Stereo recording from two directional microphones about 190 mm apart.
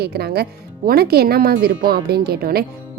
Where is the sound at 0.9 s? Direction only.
55° right (ahead or behind).